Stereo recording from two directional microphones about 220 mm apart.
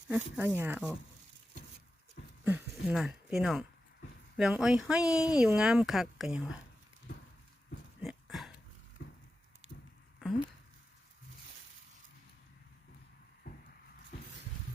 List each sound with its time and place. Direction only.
0.1 s speech: 5° right (ahead or behind)
2.4 s speech: 10° right (ahead or behind)
8.0 s a sound: centre (ahead or behind)